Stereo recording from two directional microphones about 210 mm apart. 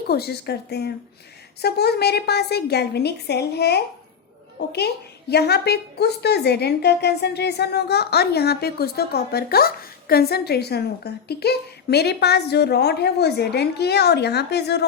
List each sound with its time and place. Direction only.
0.1 s a woman's voice: 50° left (ahead or behind)
5.3 s a woman's voice: 50° left (ahead or behind)